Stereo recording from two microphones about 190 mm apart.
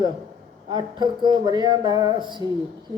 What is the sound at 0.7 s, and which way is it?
Speech, 20° right (ahead or behind).